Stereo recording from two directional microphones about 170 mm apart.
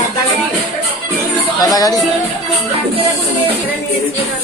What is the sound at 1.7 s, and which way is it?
Speech, 20° left (ahead or behind).